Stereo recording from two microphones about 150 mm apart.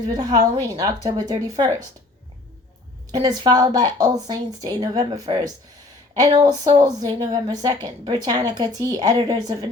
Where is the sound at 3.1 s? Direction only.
30° right (ahead or behind).